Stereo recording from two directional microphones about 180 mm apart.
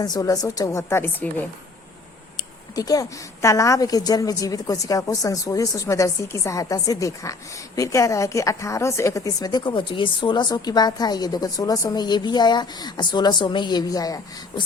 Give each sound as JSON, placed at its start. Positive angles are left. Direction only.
{"t": 0.0, "sound": "speech", "side_deg": 20}
{"t": 2.7, "sound": "a woman's voice", "side_deg": 20}